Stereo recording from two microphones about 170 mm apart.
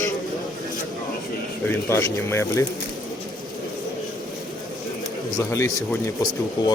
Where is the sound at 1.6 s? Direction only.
15° left (ahead or behind).